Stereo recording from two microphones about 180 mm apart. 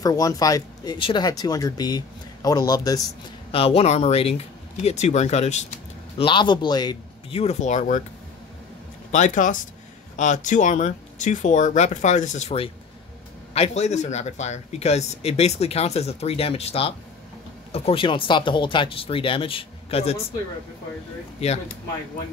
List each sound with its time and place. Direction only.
0.0 s speech: 20° left (ahead or behind)
3.5 s speech: 35° left (ahead or behind)
6.1 s speech: 25° left (ahead or behind); by 8.0 s 45° left (ahead or behind)
9.1 s speech: 45° left (ahead or behind)
21.4 s speech: 35° left (ahead or behind)